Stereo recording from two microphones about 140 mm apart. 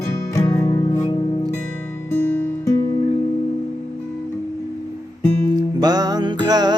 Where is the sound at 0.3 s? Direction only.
20° left (ahead or behind).